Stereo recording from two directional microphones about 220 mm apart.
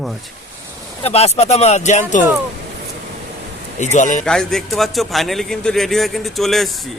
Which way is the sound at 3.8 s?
35° left (ahead or behind).